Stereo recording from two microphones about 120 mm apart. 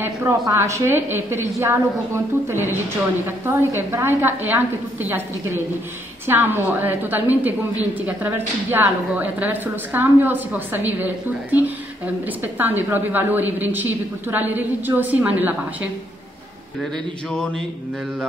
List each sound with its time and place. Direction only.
0.0 s a woman's voice: 25° right (ahead or behind)
12.5 s a woman's voice: 15° right (ahead or behind)
17.3 s speech: 5° left (ahead or behind)